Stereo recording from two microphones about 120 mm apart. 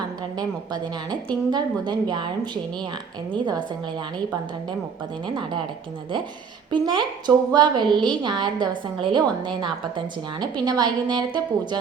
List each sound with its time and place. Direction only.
0.2 s a woman's voice: 35° right (ahead or behind)
5.2 s a woman's voice: 40° right (ahead or behind)
6.7 s a woman's voice: 40° right (ahead or behind)